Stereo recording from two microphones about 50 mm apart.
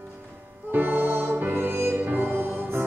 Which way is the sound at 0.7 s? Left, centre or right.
Right.